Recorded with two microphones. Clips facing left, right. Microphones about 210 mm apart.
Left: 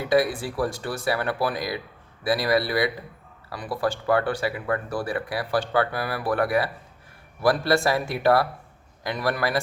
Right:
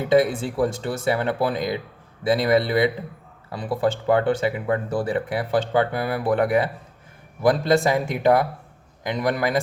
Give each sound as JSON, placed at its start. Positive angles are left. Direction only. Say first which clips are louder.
{"t": 0.0, "sound": "speech", "louder": "right 3 dB", "side_deg": -25}